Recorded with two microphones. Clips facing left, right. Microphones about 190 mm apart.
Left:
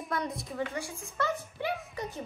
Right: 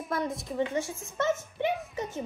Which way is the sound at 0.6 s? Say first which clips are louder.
Right 6 dB; 20° right (ahead or behind).